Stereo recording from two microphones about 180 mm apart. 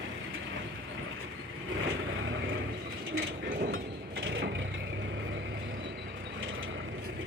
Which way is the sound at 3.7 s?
90° right.